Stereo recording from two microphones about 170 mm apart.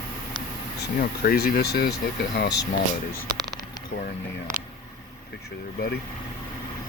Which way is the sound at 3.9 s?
40° left (ahead or behind).